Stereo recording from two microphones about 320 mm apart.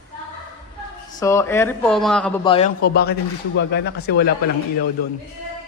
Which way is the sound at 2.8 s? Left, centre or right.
Left.